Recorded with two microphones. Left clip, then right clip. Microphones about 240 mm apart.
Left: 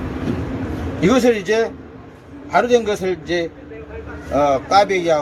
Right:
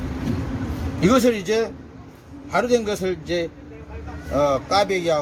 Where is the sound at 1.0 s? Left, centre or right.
Right.